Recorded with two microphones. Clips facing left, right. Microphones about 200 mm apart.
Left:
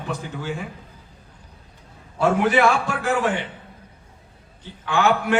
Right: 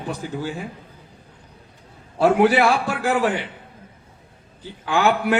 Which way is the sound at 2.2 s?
35° right (ahead or behind).